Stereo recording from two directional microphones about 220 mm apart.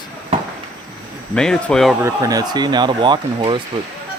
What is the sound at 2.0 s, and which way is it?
Speech, 15° right (ahead or behind).